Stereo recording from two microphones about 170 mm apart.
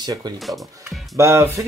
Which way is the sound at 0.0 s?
25° right (ahead or behind).